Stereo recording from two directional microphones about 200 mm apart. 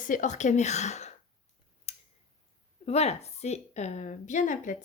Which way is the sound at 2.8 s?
30° left (ahead or behind).